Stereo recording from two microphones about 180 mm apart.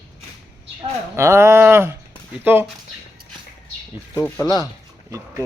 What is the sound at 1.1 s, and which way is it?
A man's voice, 15° right (ahead or behind).